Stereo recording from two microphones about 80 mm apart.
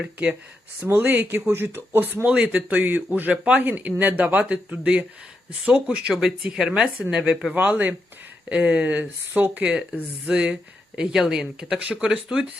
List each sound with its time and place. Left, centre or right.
0.0 s speech: centre
0.8 s speech: right
2.2 s speech: centre
7.5 s speech: right